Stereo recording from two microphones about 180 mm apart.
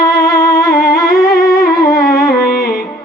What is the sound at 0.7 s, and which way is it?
Music, 55° left (ahead or behind).